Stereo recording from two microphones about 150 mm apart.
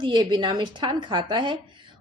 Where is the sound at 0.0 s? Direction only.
30° right (ahead or behind).